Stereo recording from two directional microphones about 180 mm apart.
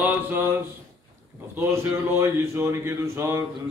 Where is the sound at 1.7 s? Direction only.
15° right (ahead or behind).